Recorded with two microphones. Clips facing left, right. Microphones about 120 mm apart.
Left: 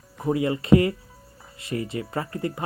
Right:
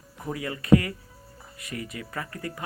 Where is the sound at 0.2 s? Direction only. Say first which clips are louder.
Left 9 dB; 25° left (ahead or behind).